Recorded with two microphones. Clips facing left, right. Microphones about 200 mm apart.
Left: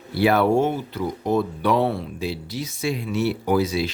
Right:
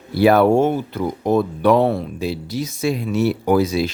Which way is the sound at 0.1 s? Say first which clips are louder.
Right 5 dB; 45° right (ahead or behind).